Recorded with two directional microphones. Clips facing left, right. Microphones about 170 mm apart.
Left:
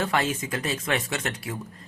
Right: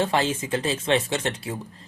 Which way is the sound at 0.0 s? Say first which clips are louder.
Right 3 dB; 30° right (ahead or behind).